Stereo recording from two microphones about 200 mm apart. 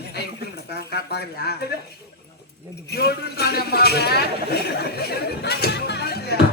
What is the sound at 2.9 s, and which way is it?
Speech, 55° left (ahead or behind).